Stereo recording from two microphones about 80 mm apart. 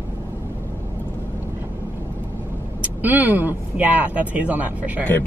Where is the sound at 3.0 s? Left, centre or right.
Right.